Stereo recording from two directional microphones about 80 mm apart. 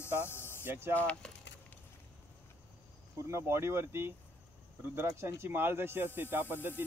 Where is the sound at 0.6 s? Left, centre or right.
Right.